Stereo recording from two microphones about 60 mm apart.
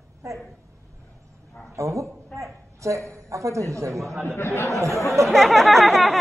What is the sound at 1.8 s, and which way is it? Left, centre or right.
A man's voice, right.